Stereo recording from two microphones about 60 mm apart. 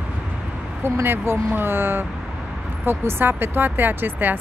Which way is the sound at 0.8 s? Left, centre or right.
Right.